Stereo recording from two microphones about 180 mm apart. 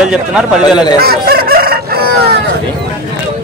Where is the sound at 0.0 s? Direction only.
5° right (ahead or behind).